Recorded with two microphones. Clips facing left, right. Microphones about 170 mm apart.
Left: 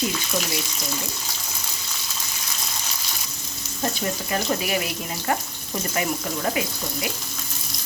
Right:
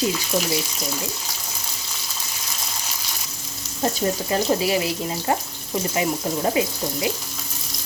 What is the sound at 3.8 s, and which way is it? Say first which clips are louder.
Speech: right 4 dB; 30° right (ahead or behind).